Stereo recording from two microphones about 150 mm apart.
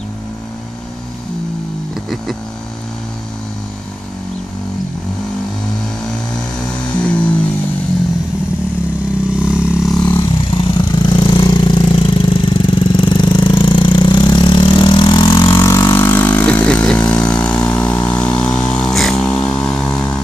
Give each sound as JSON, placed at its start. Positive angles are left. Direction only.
{"t": 9.4, "sound": "vehicle", "side_deg": -5}
{"t": 10.0, "sound": "vehicle", "side_deg": 30}
{"t": 15.5, "sound": "vehicle", "side_deg": 20}